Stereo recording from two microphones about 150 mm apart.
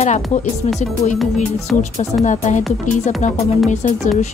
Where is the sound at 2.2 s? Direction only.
50° left (ahead or behind).